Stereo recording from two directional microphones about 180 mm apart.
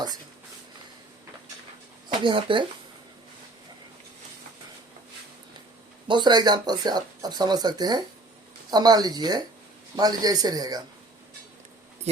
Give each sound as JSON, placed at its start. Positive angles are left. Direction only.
{"t": 2.2, "sound": "speech", "side_deg": -30}
{"t": 6.1, "sound": "speech", "side_deg": -25}